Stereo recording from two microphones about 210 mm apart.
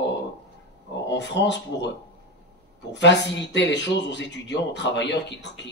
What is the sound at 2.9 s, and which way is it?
Speech, 60° left (ahead or behind).